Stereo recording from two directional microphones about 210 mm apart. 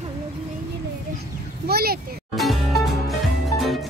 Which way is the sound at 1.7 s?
45° right (ahead or behind).